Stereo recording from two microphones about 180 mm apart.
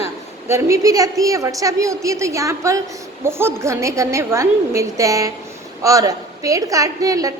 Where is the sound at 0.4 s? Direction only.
15° right (ahead or behind).